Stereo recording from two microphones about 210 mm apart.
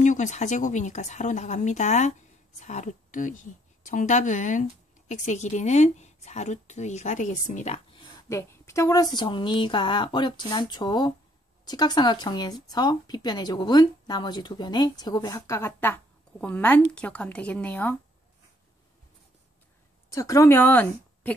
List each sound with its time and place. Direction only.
0.0 s a woman's voice: 35° left (ahead or behind)
8.3 s speech: 15° left (ahead or behind)
20.1 s a woman's voice: 15° left (ahead or behind)